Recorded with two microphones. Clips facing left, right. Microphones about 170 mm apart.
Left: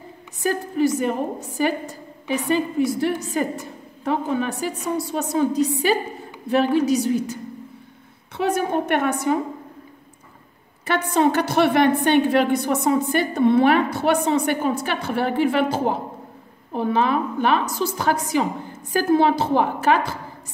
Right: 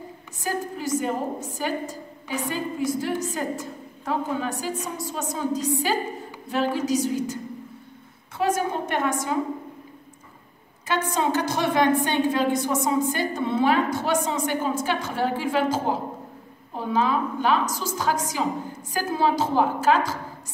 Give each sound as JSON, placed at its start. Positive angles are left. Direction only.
{"t": 0.4, "sound": "a woman's voice", "side_deg": 65}
{"t": 8.4, "sound": "a woman's voice", "side_deg": 60}
{"t": 10.9, "sound": "a woman's voice", "side_deg": 65}